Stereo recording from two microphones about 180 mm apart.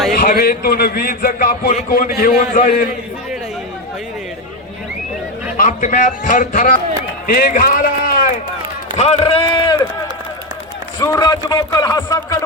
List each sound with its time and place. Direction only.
0.1 s speech: 55° left (ahead or behind)
5.5 s a man's voice: 50° left (ahead or behind)
9.0 s a man's voice: 35° left (ahead or behind)
11.0 s a man's voice: 20° left (ahead or behind)